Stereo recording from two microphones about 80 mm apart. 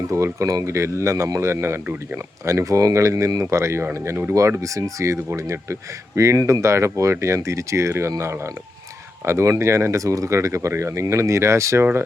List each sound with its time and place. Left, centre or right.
0.1 s speech: right
9.2 s speech: right